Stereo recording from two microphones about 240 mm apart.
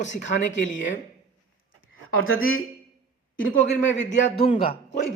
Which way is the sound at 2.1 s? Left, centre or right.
Left.